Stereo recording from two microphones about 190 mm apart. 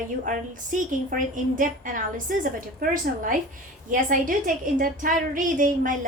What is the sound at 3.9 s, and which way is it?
Speech, 45° right (ahead or behind).